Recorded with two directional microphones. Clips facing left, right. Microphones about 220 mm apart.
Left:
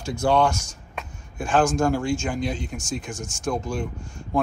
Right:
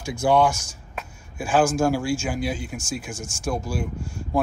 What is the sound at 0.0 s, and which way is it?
Speech, 10° right (ahead or behind).